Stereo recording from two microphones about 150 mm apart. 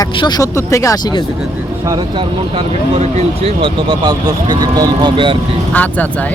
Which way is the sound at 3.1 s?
35° right (ahead or behind).